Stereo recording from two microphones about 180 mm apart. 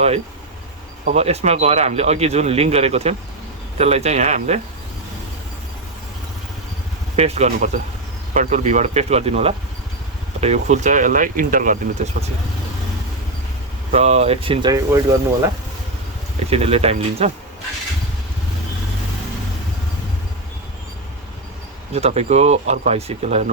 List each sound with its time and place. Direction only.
1.0 s speech: 35° right (ahead or behind)
7.2 s speech: 35° right (ahead or behind)
13.9 s speech: 35° right (ahead or behind)
16.5 s speech: 35° right (ahead or behind)
21.9 s speech: 35° right (ahead or behind)